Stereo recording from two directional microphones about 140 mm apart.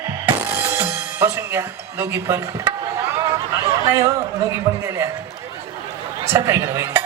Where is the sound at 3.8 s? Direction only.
20° right (ahead or behind).